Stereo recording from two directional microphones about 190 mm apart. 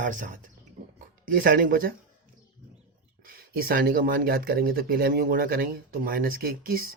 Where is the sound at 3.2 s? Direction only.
50° right (ahead or behind).